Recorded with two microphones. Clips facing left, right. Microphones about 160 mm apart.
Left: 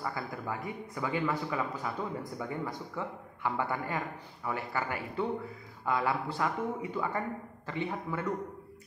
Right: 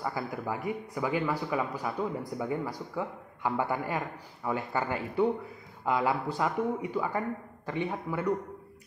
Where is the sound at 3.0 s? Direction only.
15° right (ahead or behind).